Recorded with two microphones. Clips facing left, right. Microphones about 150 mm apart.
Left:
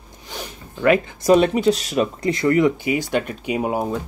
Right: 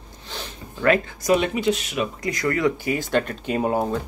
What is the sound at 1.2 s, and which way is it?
Speech, 40° left (ahead or behind).